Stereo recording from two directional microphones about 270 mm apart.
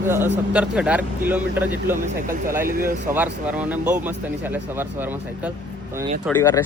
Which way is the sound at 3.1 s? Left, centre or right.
Centre.